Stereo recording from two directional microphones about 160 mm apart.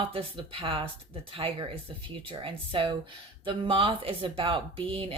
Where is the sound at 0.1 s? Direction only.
35° right (ahead or behind).